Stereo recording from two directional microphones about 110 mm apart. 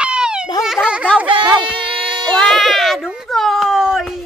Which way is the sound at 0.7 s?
5° right (ahead or behind).